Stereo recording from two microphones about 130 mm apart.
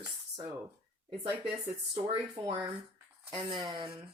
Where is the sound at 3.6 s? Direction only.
30° right (ahead or behind).